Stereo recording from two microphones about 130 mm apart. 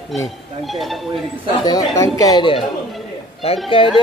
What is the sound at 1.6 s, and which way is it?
Speech, 25° left (ahead or behind).